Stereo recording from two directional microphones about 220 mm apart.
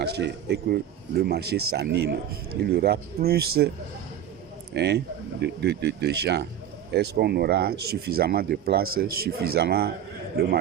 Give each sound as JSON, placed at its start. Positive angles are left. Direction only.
{"t": 0.0, "sound": "speech", "side_deg": -50}
{"t": 4.7, "sound": "speech", "side_deg": -50}